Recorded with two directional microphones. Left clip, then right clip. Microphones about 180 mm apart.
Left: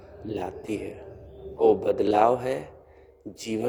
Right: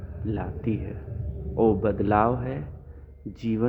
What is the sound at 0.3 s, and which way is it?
A man's voice, 30° left (ahead or behind).